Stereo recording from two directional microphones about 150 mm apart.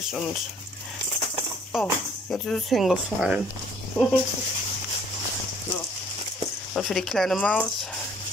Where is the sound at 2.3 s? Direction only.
Centre (ahead or behind).